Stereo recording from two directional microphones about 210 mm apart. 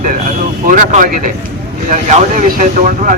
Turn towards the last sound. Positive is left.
turn(degrees=-40)  # may be behind; listen again after turning